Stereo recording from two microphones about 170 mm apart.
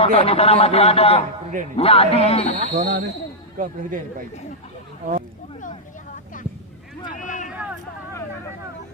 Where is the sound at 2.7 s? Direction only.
50° right (ahead or behind).